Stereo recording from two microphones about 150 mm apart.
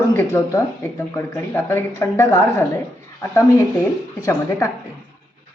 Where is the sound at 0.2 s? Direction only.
20° left (ahead or behind).